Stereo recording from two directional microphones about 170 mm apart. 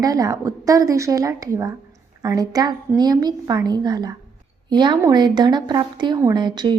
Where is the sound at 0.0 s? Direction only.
20° right (ahead or behind).